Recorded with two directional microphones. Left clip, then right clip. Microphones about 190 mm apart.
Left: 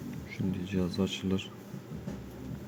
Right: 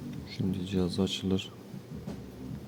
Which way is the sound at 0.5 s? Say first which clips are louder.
Right 2 dB; 25° right (ahead or behind).